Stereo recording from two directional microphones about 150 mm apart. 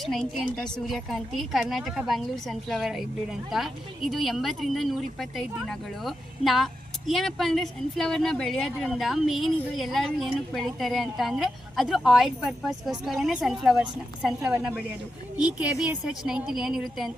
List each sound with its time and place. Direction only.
0.0 s a woman's voice: centre (ahead or behind)